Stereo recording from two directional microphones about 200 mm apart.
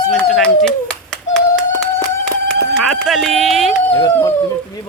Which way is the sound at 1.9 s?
10° left (ahead or behind).